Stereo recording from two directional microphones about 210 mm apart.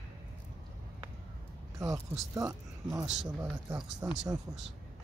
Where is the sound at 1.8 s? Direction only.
15° right (ahead or behind).